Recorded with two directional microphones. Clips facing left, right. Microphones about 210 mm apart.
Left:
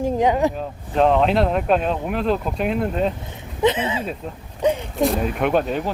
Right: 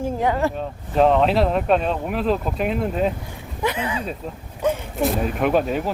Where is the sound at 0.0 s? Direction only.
15° left (ahead or behind).